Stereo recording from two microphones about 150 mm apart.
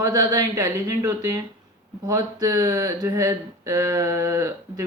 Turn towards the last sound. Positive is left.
turn(degrees=-20)  # may be behind; listen again after turning